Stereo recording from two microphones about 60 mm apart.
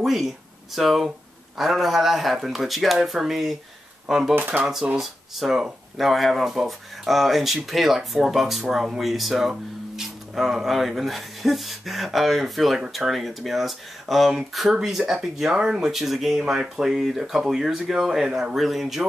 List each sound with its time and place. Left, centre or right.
0.0 s speech: centre
4.4 s speech: right
4.9 s speech: centre